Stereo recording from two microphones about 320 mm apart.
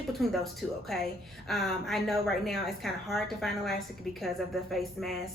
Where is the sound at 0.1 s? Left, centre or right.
Centre.